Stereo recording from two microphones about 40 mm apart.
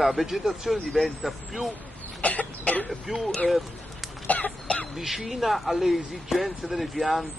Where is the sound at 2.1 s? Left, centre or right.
Left.